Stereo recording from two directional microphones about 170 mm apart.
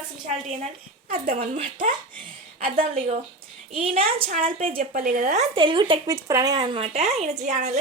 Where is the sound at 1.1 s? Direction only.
55° right (ahead or behind).